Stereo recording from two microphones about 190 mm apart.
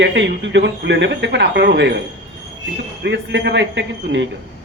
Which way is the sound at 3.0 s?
70° right (ahead or behind).